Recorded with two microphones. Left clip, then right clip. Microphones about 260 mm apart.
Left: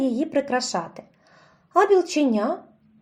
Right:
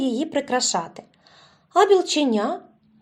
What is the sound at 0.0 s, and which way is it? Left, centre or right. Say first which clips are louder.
Speech: even; centre.